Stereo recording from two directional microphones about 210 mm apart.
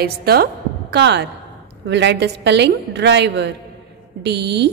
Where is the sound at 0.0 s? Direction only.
50° right (ahead or behind).